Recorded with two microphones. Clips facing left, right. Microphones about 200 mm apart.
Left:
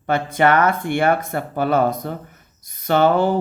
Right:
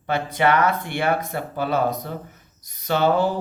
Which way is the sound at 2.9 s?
55° left (ahead or behind).